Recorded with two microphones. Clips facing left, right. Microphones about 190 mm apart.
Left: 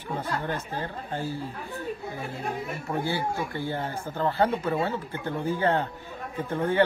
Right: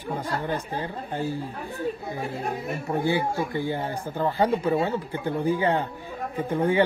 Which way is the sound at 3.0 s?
15° right (ahead or behind).